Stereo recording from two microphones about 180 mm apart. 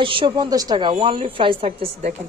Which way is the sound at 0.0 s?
30° right (ahead or behind).